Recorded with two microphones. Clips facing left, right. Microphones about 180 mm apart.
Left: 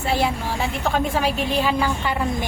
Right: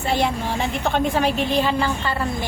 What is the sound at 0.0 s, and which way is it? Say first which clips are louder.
A woman's voice: right 1 dB; 5° left (ahead or behind).